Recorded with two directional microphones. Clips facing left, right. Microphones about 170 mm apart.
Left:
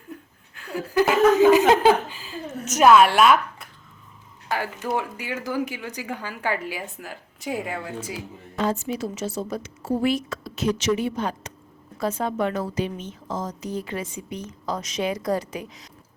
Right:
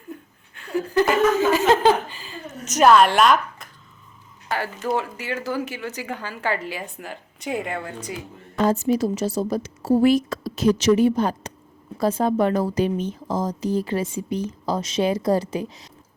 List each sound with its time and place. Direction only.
0.1 s a woman's voice: centre (ahead or behind)
8.5 s a woman's voice: 40° right (ahead or behind)